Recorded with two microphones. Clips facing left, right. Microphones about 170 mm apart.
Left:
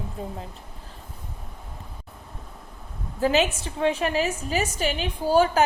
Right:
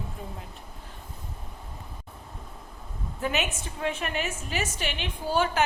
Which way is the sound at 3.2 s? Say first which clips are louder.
Left 8 dB; 30° left (ahead or behind).